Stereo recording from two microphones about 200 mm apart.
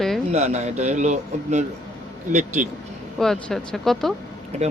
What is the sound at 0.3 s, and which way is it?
Speech, 35° right (ahead or behind).